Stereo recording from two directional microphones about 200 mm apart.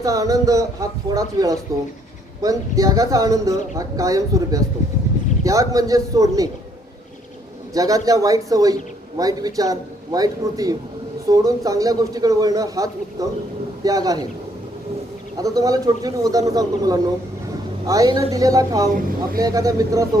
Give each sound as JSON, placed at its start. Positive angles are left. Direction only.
{"t": 0.0, "sound": "speech", "side_deg": -15}
{"t": 7.7, "sound": "speech", "side_deg": -15}
{"t": 15.4, "sound": "speech", "side_deg": -15}